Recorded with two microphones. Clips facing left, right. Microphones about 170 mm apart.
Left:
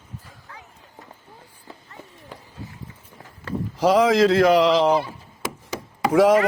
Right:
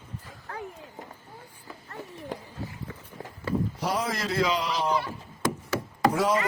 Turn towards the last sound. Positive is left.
turn(degrees=90)